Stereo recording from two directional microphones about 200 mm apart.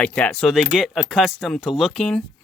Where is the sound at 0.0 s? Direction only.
5° left (ahead or behind).